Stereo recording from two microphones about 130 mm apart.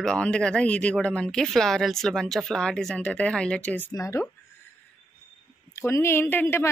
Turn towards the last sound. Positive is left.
turn(degrees=15)  # may be behind; listen again after turning